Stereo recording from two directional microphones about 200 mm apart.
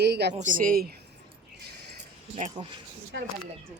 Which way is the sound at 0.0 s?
55° right (ahead or behind).